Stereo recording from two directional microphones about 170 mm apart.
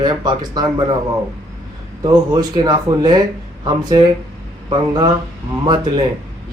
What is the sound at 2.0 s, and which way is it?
Speech, 25° right (ahead or behind).